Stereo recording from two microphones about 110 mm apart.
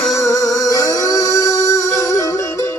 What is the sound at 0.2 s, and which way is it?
Music, 30° left (ahead or behind).